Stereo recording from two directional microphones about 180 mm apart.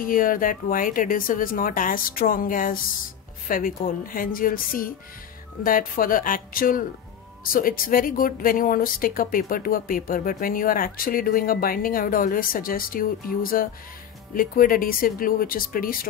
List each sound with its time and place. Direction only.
0.0 s speech: 50° left (ahead or behind)